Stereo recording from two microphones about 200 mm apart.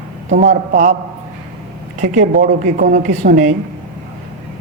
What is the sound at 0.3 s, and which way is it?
Speech, 40° right (ahead or behind).